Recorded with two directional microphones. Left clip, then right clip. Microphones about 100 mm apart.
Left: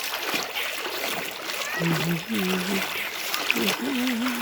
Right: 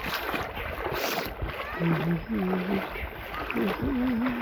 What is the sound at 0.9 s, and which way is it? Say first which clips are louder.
Boat: even; 20° left (ahead or behind).